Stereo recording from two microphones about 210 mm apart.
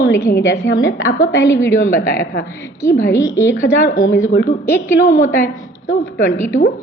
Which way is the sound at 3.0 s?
15° left (ahead or behind).